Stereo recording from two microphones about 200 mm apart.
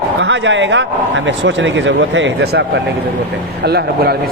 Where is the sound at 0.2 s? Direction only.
65° right (ahead or behind).